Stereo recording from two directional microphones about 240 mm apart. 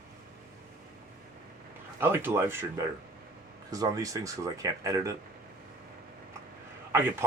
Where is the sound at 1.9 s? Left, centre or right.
Centre.